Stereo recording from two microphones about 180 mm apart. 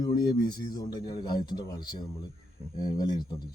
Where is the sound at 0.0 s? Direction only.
25° left (ahead or behind).